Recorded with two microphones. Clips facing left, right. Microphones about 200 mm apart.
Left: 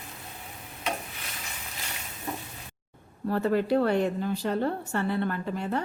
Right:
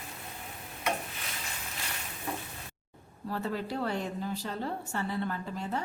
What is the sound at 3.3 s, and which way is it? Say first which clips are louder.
A woman's voice: left 10 dB; 65° left (ahead or behind).